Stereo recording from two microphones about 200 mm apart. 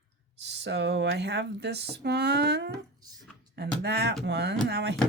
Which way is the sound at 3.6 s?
55° right (ahead or behind).